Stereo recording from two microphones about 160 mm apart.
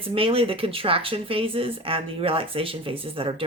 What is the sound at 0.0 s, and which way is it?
Speech, 35° right (ahead or behind).